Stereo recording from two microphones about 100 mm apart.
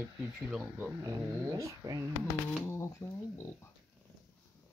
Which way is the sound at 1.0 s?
35° right (ahead or behind).